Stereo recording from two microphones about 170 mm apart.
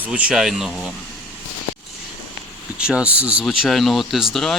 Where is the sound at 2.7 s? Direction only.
5° right (ahead or behind).